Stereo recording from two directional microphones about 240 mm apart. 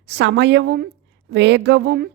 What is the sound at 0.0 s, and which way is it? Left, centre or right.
A woman's voice, right.